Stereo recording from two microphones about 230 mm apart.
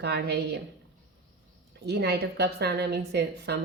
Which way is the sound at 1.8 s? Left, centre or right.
Right.